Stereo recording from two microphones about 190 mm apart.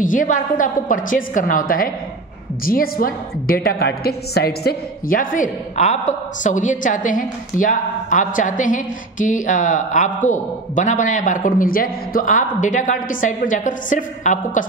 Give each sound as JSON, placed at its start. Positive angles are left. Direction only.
{"t": 0.0, "sound": "a woman's voice", "side_deg": 45}